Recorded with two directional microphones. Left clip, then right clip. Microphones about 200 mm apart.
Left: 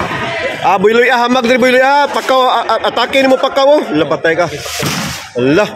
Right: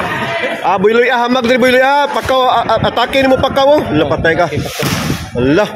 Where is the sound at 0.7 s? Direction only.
5° left (ahead or behind).